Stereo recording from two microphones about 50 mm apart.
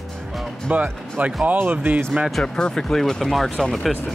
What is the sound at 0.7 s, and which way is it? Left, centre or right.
Speech, right.